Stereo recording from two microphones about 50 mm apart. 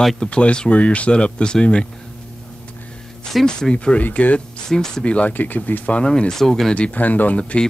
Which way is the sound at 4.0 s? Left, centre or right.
Left.